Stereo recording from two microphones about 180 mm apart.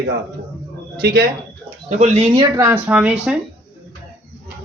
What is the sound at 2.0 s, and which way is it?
Speech, 35° right (ahead or behind).